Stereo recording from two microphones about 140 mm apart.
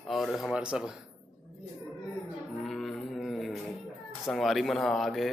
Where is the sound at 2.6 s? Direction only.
Centre (ahead or behind).